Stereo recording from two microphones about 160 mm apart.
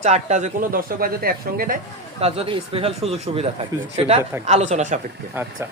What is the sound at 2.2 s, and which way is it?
A man's voice, 40° right (ahead or behind).